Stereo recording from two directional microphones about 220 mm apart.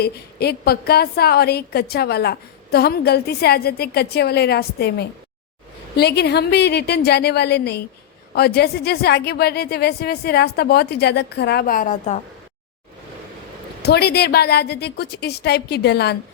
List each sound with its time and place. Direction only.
0.0 s a woman's voice: 45° left (ahead or behind)
13.8 s a woman's voice: 45° left (ahead or behind)